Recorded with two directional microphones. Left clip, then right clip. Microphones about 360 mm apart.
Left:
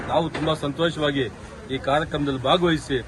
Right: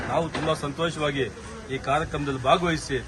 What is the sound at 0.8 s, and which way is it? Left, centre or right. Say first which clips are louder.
A man's voice: left 3 dB; centre.